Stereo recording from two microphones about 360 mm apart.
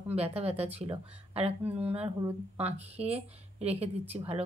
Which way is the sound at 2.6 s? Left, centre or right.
Centre.